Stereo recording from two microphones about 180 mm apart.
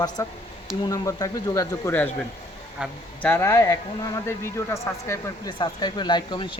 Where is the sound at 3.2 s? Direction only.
10° left (ahead or behind).